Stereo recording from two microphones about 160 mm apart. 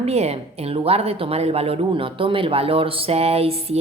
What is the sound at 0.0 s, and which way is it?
A woman's voice, 40° right (ahead or behind).